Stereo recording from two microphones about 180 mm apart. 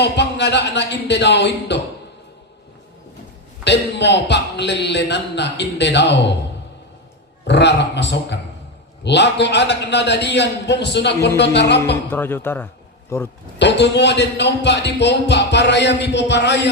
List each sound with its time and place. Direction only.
0.0 s a man's voice: 70° left (ahead or behind)
3.6 s a man's voice: 75° left (ahead or behind)
7.4 s a man's voice: 70° left (ahead or behind)
12.1 s speech: 10° left (ahead or behind)
13.6 s a man's voice: 75° left (ahead or behind)